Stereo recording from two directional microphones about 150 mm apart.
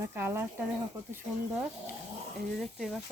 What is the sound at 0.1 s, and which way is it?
Speech, 15° right (ahead or behind).